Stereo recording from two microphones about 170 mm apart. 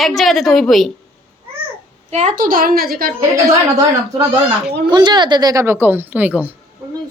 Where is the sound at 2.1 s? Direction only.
45° right (ahead or behind); by 3.1 s 60° right (ahead or behind).